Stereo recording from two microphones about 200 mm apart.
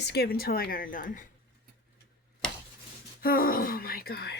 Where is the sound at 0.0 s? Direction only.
55° left (ahead or behind).